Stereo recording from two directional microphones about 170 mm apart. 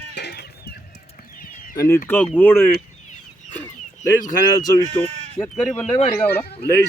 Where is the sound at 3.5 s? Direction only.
15° left (ahead or behind).